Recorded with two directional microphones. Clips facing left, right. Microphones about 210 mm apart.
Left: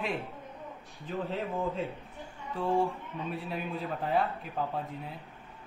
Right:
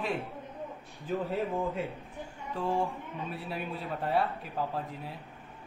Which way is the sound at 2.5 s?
Centre (ahead or behind).